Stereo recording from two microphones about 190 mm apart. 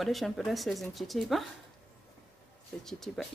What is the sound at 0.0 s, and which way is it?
Speech, centre (ahead or behind).